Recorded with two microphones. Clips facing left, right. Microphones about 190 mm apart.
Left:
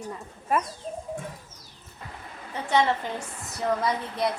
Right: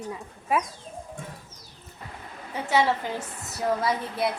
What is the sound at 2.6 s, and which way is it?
Speech, 5° right (ahead or behind).